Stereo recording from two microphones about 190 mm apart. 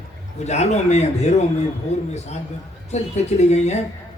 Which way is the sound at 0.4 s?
35° left (ahead or behind).